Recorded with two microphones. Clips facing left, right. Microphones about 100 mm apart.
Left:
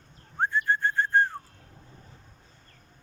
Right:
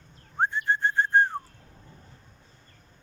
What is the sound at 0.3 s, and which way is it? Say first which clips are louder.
Whistling: even; 25° right (ahead or behind).